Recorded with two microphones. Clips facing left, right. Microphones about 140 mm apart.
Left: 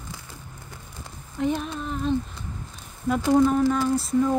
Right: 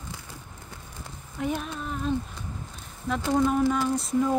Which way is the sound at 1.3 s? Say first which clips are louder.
Left 4 dB; 5° right (ahead or behind).